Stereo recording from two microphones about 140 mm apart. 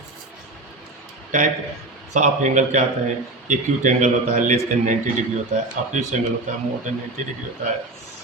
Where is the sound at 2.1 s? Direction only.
60° right (ahead or behind).